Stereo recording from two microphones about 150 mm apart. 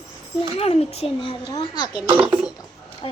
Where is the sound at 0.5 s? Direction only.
40° left (ahead or behind).